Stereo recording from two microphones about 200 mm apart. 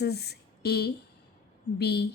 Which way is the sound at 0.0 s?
55° left (ahead or behind).